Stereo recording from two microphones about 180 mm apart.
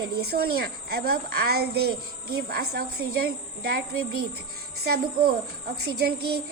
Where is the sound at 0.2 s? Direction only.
60° right (ahead or behind).